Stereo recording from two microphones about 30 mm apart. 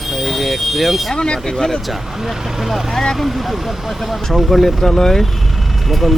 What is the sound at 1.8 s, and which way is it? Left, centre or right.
Speech, centre.